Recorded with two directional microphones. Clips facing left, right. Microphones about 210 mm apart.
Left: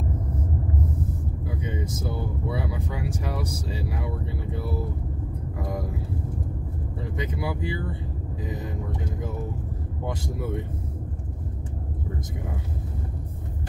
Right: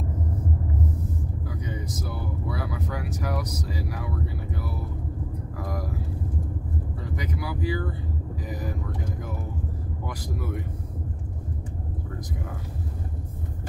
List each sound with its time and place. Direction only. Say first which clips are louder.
1.6 s vehicle: left 4 dB; 25° left (ahead or behind)
5.6 s speech: left 2 dB; 25° left (ahead or behind)
7.0 s speech: left 4 dB; 25° left (ahead or behind)
10.0 s speech: left 4 dB; 25° left (ahead or behind)